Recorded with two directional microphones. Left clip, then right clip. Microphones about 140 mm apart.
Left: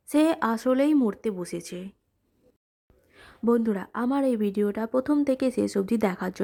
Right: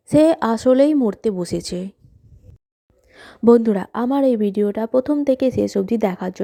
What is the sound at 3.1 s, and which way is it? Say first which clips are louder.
A woman's voice: right 11 dB; 45° right (ahead or behind).